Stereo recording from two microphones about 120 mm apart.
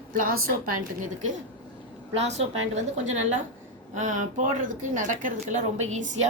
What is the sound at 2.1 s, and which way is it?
A woman's voice, 65° right (ahead or behind).